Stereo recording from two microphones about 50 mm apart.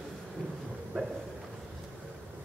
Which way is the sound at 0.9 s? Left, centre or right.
Right.